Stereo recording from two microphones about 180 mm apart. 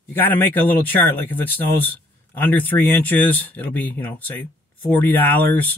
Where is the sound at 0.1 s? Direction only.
10° left (ahead or behind).